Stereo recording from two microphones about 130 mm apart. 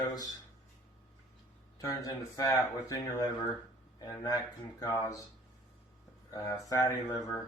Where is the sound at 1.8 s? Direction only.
25° left (ahead or behind).